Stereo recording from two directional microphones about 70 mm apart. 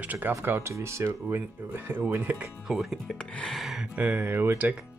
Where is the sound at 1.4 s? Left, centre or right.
Right.